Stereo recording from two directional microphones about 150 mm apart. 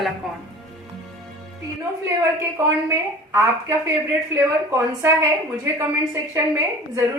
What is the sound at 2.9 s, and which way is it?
A woman's voice, 20° right (ahead or behind).